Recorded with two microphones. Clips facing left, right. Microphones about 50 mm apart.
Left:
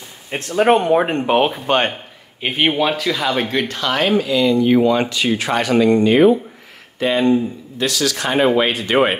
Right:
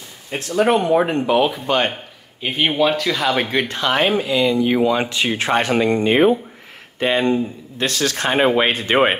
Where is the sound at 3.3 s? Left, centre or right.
Centre.